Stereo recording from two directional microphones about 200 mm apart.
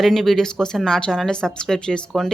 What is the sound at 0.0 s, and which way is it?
Speech, centre (ahead or behind).